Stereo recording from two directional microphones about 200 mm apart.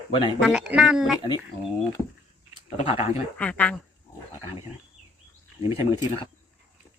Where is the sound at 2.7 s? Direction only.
30° left (ahead or behind).